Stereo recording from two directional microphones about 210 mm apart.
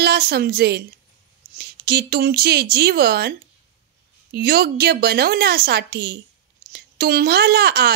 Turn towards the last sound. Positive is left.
turn(degrees=-50)  # may be behind; listen again after turning